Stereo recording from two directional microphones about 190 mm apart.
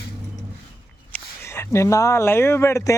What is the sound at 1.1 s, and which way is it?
Speech, 15° left (ahead or behind).